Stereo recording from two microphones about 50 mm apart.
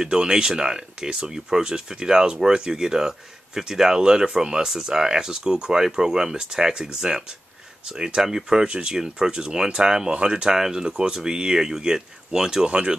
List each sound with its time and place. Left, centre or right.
0.0 s speech: centre
12.6 s speech: right